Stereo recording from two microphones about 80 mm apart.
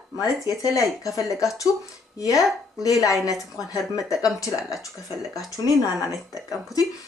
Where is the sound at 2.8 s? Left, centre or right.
Left.